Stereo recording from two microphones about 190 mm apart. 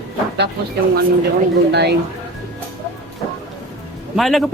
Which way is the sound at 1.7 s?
60° right (ahead or behind).